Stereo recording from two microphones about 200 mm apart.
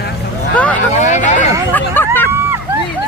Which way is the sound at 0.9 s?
35° left (ahead or behind).